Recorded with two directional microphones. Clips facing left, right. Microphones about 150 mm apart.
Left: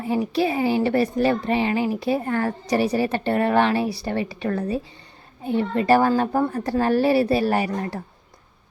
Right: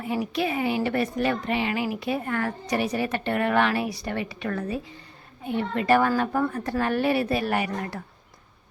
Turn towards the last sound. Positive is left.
turn(degrees=35)  # may be behind; listen again after turning